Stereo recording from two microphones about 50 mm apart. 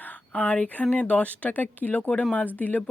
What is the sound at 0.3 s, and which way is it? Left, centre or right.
Speech, left.